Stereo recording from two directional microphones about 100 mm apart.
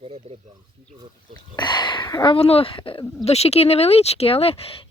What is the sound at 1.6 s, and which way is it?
Speech, 50° left (ahead or behind).